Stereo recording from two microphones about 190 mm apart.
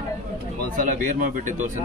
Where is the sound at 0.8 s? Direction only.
45° right (ahead or behind).